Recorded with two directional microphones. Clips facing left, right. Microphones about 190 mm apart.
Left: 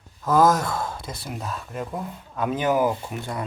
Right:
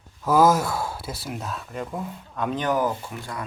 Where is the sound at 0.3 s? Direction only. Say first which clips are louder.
Even; 10° right (ahead or behind); by 2.9 s 10° left (ahead or behind).